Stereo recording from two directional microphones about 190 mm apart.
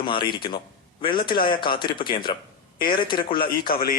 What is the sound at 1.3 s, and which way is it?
Speech, 50° left (ahead or behind).